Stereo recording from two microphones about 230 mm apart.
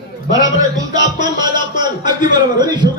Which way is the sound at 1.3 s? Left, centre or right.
Centre.